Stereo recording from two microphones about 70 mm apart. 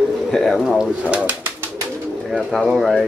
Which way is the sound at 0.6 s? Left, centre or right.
Centre.